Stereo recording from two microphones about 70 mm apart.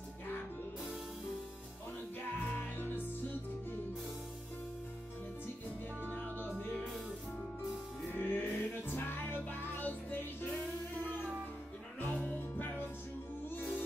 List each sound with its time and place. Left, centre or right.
2.4 s music: left
6.0 s music: left
8.1 s music: left
12.4 s music: left